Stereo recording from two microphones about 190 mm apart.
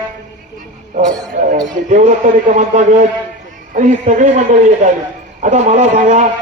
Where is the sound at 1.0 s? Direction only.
40° right (ahead or behind).